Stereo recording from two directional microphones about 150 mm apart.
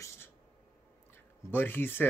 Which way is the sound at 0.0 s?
20° left (ahead or behind).